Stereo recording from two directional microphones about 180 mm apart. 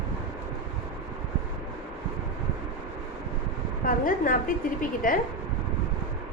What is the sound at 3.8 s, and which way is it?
A woman's voice, 50° left (ahead or behind).